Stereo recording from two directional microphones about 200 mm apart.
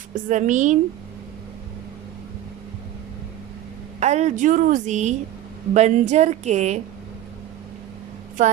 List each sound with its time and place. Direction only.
0.1 s a woman's voice: 40° right (ahead or behind)
4.0 s a woman's voice: 35° right (ahead or behind)